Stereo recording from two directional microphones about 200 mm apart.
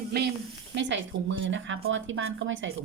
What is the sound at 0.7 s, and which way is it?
A woman's voice, 65° right (ahead or behind).